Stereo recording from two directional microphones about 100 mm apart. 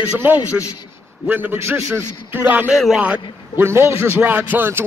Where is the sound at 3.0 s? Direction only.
15° right (ahead or behind).